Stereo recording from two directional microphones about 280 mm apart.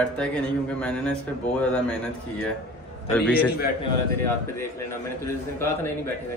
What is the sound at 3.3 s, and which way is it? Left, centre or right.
Speech, centre.